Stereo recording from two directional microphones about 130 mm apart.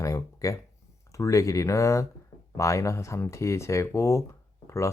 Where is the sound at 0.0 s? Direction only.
25° left (ahead or behind).